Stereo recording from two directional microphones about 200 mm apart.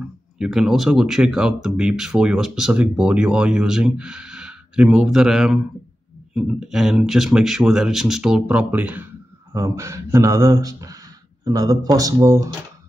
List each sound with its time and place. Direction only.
0.4 s speech: centre (ahead or behind)